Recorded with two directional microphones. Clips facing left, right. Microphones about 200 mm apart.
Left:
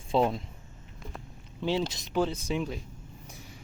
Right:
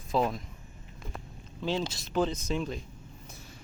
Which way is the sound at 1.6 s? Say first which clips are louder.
Left 2 dB; 15° left (ahead or behind).